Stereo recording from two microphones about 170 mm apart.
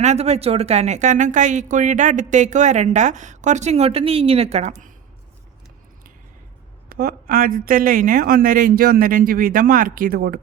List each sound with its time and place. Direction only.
0.0 s a woman's voice: 40° right (ahead or behind)
6.8 s speech: 60° right (ahead or behind)